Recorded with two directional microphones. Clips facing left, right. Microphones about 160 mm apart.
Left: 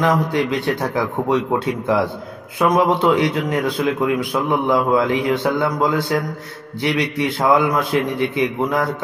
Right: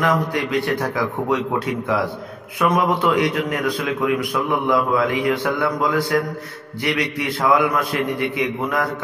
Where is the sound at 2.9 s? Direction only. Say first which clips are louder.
Left 2 dB; 25° left (ahead or behind).